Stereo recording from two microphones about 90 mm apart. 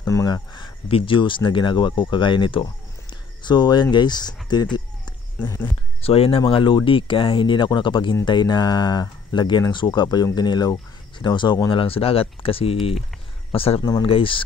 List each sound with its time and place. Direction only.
0.0 s speech: 40° left (ahead or behind)
0.8 s speech: 85° left; by 4.8 s 55° left (ahead or behind)
6.0 s speech: 90° left
6.5 s speech: 70° left (ahead or behind)
11.7 s speech: 90° left